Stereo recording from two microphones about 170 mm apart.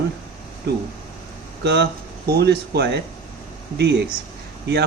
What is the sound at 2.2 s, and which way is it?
Speech, 70° right (ahead or behind).